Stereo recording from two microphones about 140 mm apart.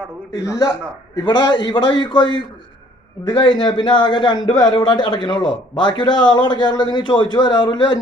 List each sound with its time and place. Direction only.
0.3 s a man's voice: 25° left (ahead or behind)
3.3 s a man's voice: 30° left (ahead or behind)